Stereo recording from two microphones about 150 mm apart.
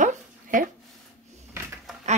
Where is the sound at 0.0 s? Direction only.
60° right (ahead or behind).